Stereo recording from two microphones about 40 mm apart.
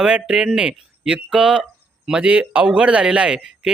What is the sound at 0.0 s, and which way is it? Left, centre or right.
Speech, centre.